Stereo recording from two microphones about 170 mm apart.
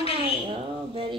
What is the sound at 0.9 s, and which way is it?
Speech, 30° right (ahead or behind).